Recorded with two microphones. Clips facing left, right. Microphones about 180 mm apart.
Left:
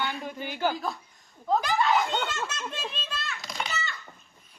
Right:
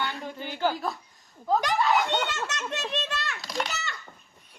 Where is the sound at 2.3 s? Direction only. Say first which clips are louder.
Right 2 dB; 75° right (ahead or behind).